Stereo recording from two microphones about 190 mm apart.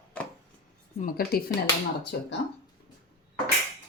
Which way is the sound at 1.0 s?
50° left (ahead or behind).